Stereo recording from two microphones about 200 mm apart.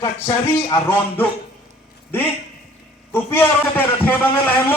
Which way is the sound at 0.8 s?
10° left (ahead or behind).